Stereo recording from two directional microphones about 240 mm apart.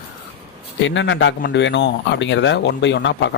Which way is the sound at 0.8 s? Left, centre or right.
Left.